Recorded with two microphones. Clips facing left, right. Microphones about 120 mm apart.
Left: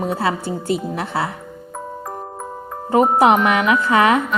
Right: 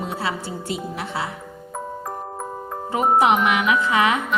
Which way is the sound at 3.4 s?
40° left (ahead or behind).